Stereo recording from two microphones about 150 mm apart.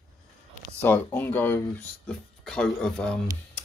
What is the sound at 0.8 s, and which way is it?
Speech, 10° left (ahead or behind).